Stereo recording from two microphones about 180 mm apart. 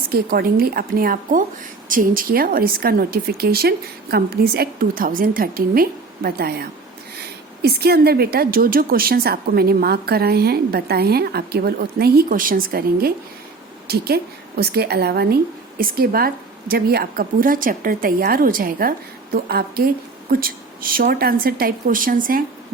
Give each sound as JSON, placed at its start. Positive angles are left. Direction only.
{"t": 0.1, "sound": "a woman's voice", "side_deg": -55}